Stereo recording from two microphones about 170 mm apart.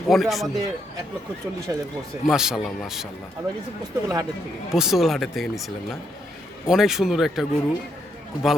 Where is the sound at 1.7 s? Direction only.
20° right (ahead or behind).